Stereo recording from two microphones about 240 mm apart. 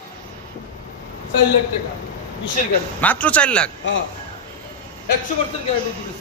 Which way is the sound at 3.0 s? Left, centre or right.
Centre.